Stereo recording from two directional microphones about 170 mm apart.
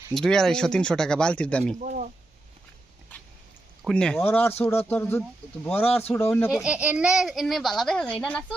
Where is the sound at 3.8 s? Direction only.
5° left (ahead or behind).